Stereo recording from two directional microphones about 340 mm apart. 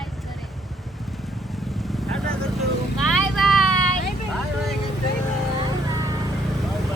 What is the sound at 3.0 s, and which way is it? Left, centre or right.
Vehicle, centre.